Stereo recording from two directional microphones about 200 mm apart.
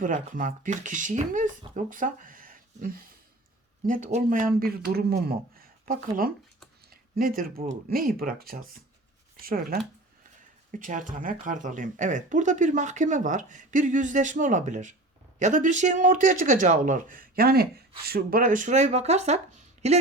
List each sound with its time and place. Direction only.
0.0 s speech: 40° right (ahead or behind)